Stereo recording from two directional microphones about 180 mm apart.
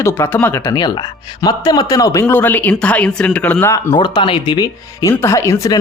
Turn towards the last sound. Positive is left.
turn(degrees=20)  # may be behind; listen again after turning